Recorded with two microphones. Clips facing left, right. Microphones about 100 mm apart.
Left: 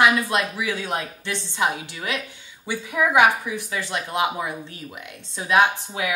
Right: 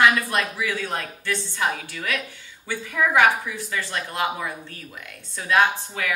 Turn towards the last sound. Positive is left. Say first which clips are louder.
# left 1 dB
turn(degrees=15)  # may be behind; listen again after turning